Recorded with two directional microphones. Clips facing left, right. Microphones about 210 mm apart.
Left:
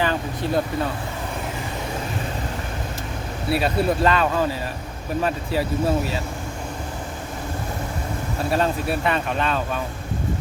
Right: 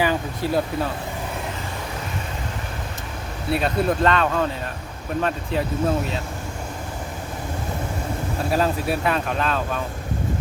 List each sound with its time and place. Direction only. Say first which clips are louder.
0.0 s speech: right 1 dB; 10° right (ahead or behind)
3.5 s speech: even; 5° left (ahead or behind)
8.4 s speech: even; centre (ahead or behind)